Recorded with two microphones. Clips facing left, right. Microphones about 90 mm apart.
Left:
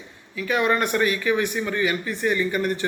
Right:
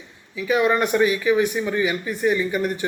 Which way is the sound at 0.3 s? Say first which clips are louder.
Right 2 dB; 15° right (ahead or behind).